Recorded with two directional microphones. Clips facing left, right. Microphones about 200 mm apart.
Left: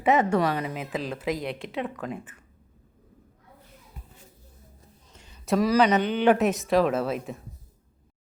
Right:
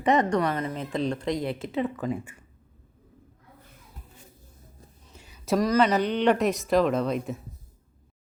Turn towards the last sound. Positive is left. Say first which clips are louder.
# right 1 dB
turn(degrees=0)  # may be behind; listen again after turning